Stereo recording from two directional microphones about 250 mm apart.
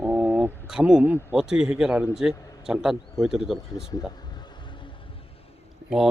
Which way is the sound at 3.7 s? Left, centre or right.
Centre.